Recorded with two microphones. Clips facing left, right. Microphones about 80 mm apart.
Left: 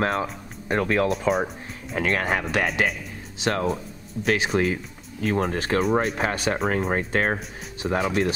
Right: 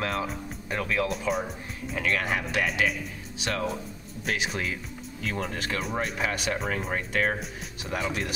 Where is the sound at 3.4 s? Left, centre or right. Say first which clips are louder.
Left 6 dB; left.